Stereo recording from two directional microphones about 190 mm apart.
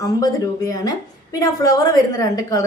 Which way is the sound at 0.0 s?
20° left (ahead or behind).